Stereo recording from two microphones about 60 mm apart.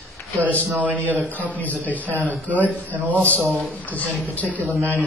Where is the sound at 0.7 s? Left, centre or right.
Right.